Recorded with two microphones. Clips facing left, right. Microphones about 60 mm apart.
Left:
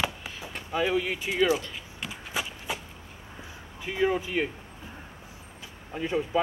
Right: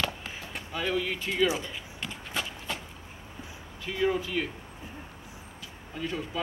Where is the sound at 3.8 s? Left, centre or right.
Centre.